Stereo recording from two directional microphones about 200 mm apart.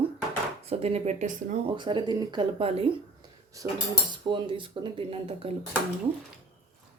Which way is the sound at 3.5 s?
15° right (ahead or behind).